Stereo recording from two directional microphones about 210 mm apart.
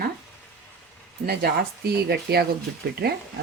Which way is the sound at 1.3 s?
50° right (ahead or behind).